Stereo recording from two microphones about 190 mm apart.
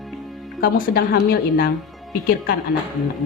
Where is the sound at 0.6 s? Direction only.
55° left (ahead or behind).